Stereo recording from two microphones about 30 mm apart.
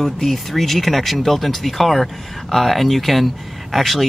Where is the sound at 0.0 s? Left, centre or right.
Centre.